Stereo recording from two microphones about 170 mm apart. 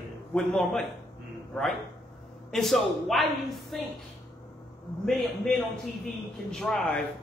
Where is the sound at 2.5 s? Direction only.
Centre (ahead or behind).